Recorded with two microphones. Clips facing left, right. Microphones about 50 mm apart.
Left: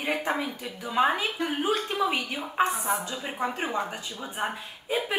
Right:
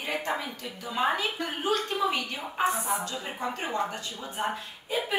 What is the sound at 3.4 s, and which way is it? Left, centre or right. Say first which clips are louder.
Speech: left 1 dB; centre.